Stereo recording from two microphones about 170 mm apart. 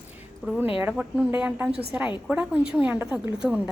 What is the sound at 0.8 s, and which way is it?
A woman's voice, 10° right (ahead or behind).